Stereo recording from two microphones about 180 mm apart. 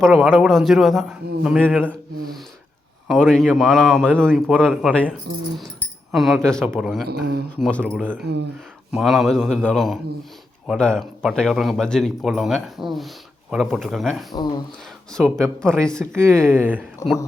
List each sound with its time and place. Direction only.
0.3 s a man's voice: centre (ahead or behind)
1.8 s a man's voice: 5° left (ahead or behind)
6.1 s a man's voice: centre (ahead or behind)
14.3 s speech: 20° left (ahead or behind)
15.1 s a man's voice: 5° left (ahead or behind)
16.4 s speech: 10° right (ahead or behind)
17.0 s speech: 15° left (ahead or behind)